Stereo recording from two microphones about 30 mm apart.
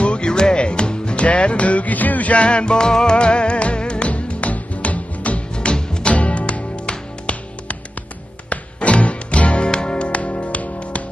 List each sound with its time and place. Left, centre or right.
0.0 s music: left
2.3 s music: left
3.2 s music: left
4.1 s music: left
5.6 s music: left
6.1 s music: left
8.5 s music: left
9.7 s music: left
10.1 s music: left